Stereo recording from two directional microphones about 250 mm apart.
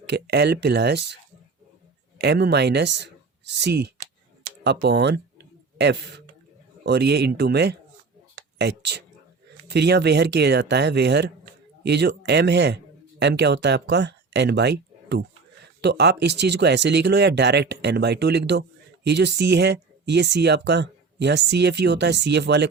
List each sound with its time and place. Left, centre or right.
0.0 s speech: right
2.1 s speech: right